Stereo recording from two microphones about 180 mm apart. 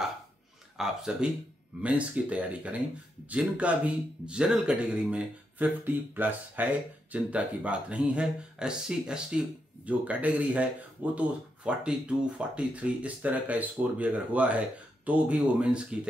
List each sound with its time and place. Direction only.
0.7 s speech: 5° right (ahead or behind)